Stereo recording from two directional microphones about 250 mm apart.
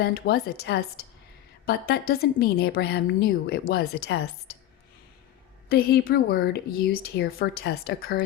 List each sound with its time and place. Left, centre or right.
0.0 s a woman's voice: left
5.6 s a woman's voice: left